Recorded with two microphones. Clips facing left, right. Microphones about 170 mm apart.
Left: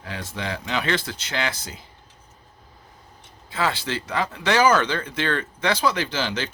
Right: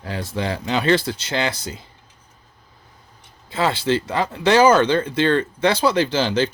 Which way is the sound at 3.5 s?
30° right (ahead or behind).